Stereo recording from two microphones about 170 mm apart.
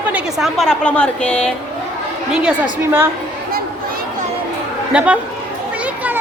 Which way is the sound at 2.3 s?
5° right (ahead or behind).